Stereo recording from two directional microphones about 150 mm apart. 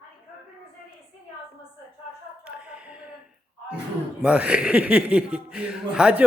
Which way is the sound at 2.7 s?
5° right (ahead or behind).